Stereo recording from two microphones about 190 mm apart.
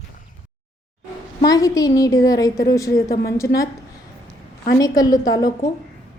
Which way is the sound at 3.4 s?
65° left (ahead or behind).